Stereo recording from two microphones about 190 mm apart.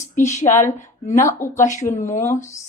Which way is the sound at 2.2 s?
15° left (ahead or behind).